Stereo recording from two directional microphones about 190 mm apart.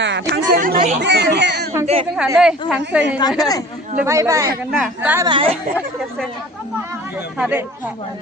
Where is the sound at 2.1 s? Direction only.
Centre (ahead or behind).